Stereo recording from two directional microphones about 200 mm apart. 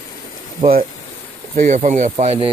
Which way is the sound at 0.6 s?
25° right (ahead or behind).